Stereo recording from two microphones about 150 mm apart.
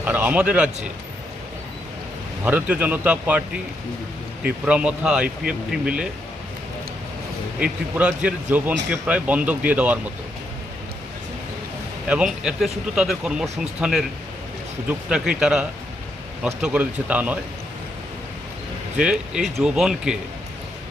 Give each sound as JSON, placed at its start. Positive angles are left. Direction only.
{"t": 0.0, "sound": "speech", "side_deg": -10}
{"t": 2.4, "sound": "speech", "side_deg": -10}
{"t": 4.6, "sound": "speech", "side_deg": -5}
{"t": 7.6, "sound": "speech", "side_deg": -10}
{"t": 12.0, "sound": "speech", "side_deg": -5}
{"t": 18.9, "sound": "speech", "side_deg": -5}